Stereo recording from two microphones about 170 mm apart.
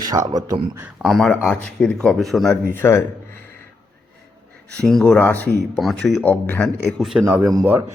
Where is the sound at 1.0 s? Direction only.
5° left (ahead or behind).